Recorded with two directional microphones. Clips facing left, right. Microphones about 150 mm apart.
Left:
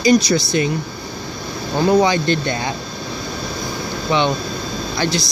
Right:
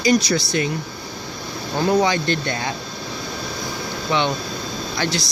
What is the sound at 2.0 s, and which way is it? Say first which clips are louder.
Speech: left 3 dB; 20° left (ahead or behind).